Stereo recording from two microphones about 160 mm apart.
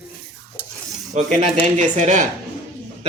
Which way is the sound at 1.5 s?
45° right (ahead or behind).